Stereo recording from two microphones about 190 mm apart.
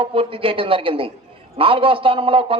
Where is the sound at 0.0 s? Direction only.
30° right (ahead or behind).